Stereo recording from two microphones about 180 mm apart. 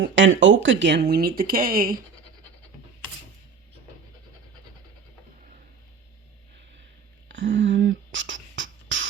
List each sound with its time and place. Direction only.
0.0 s speech: 90° right; by 2.0 s 50° right (ahead or behind)
7.3 s beatboxing: 90° right